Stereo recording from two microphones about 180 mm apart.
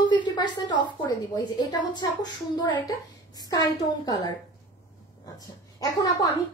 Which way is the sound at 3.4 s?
20° left (ahead or behind).